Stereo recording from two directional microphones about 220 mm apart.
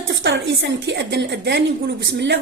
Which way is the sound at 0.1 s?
50° right (ahead or behind).